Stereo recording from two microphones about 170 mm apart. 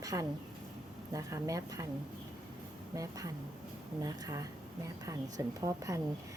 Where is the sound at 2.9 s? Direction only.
20° right (ahead or behind).